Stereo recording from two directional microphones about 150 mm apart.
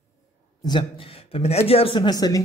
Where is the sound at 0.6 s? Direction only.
30° left (ahead or behind).